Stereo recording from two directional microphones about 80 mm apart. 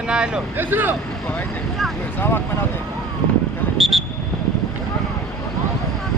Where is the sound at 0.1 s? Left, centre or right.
Centre.